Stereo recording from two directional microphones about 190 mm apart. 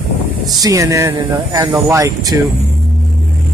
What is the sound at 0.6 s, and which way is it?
Speech, 15° right (ahead or behind).